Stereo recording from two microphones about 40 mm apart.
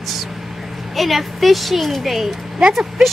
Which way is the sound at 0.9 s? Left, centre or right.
Centre.